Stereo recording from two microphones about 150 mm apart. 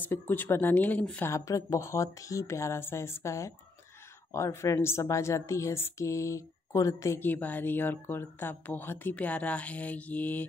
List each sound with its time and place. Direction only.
0.0 s a woman's voice: 10° left (ahead or behind)
1.3 s a woman's voice: 20° left (ahead or behind)